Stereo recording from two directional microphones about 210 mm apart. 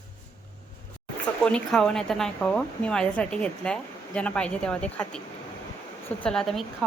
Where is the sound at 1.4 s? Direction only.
5° left (ahead or behind).